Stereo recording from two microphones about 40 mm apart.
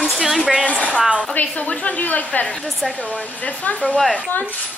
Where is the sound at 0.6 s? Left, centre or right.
Left.